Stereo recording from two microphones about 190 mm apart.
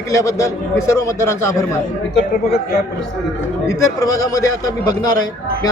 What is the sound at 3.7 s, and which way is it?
A man's voice, 15° left (ahead or behind).